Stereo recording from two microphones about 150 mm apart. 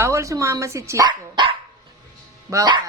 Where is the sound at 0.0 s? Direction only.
20° right (ahead or behind).